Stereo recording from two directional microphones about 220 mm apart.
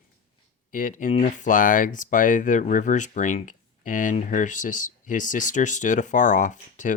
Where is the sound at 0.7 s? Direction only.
35° left (ahead or behind).